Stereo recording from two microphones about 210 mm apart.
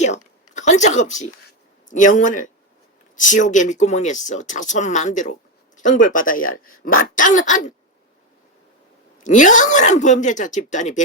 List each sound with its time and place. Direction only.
0.0 s a sound: 35° left (ahead or behind)
1.9 s speech: 35° left (ahead or behind)
9.2 s speech: 35° left (ahead or behind)